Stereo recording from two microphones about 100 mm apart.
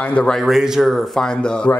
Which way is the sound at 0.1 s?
10° left (ahead or behind).